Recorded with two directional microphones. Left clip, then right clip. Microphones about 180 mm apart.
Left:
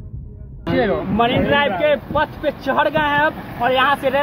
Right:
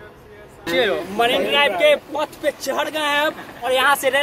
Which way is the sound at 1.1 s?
20° right (ahead or behind).